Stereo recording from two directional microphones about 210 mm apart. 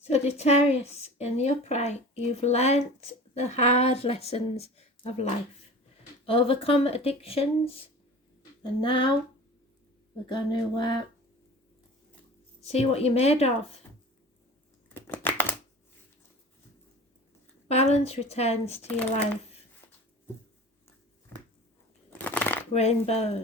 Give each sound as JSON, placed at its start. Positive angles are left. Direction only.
{"t": 0.0, "sound": "a woman's voice", "side_deg": 30}
{"t": 6.2, "sound": "speech", "side_deg": 25}
{"t": 8.8, "sound": "speech", "side_deg": 25}
{"t": 10.2, "sound": "speech", "side_deg": 20}
{"t": 12.6, "sound": "speech", "side_deg": 30}
{"t": 14.9, "sound": "a sound", "side_deg": 10}
{"t": 17.7, "sound": "speech", "side_deg": 30}
{"t": 22.1, "sound": "shuffling cards", "side_deg": 5}
{"t": 22.7, "sound": "speech", "side_deg": 30}